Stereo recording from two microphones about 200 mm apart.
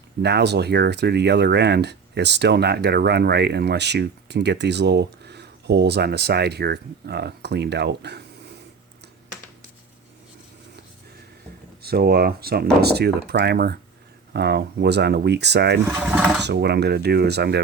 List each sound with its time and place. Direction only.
0.2 s speech: 55° right (ahead or behind)
11.8 s speech: 50° right (ahead or behind)
15.9 s speech: 10° right (ahead or behind)
16.1 s a sound: 5° right (ahead or behind)
16.4 s speech: 55° right (ahead or behind)